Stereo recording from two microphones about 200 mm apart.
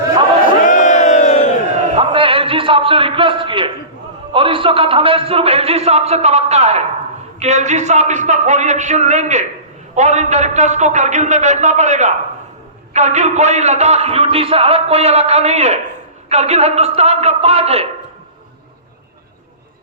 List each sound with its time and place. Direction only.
0.6 s crowd: 40° left (ahead or behind)
2.0 s a sound: 25° right (ahead or behind)
4.4 s a man's voice: 25° right (ahead or behind)